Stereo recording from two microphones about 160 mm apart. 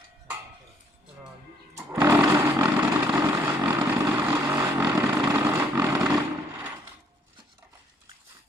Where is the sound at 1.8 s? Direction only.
20° right (ahead or behind).